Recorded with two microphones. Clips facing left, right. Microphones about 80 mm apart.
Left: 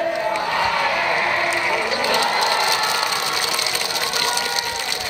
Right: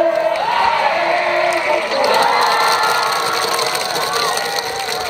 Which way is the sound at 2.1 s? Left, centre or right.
Right.